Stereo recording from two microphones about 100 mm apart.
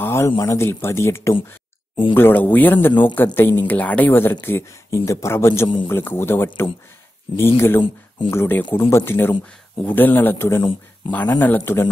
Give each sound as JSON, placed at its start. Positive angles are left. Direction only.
{"t": 0.0, "sound": "speech", "side_deg": 25}